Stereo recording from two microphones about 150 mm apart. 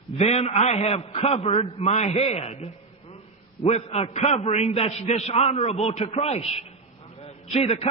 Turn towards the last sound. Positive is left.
turn(degrees=45)  # may be behind; listen again after turning